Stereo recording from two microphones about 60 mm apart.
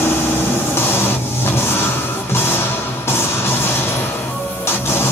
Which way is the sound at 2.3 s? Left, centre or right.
Left.